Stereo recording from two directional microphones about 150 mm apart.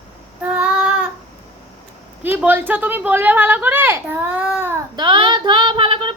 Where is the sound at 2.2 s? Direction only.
15° right (ahead or behind).